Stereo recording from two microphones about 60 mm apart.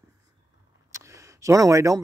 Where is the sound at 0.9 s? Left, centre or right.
Right.